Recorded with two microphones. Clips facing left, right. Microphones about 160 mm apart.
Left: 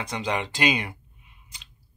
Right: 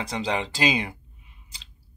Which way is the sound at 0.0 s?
35° right (ahead or behind).